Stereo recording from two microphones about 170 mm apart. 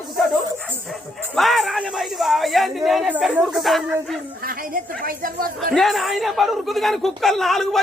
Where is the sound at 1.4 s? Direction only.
Centre (ahead or behind).